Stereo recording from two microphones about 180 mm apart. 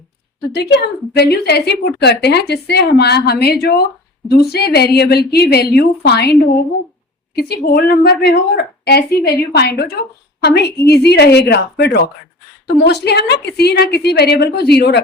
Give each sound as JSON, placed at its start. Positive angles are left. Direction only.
{"t": 0.5, "sound": "a woman's voice", "side_deg": 70}